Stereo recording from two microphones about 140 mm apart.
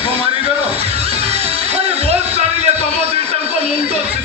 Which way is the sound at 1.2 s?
45° right (ahead or behind).